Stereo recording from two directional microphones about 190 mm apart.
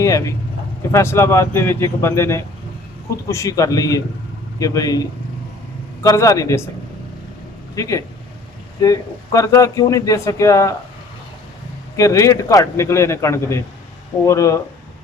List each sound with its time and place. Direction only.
0.0 s a man's voice: 15° left (ahead or behind)
6.0 s a man's voice: 15° left (ahead or behind)
7.8 s a man's voice: 15° left (ahead or behind)
11.9 s a man's voice: 15° left (ahead or behind)